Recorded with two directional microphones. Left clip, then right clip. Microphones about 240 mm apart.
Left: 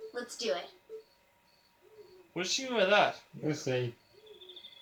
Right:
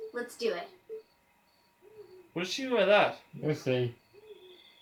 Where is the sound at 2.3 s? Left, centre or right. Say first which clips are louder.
Right 2 dB; centre.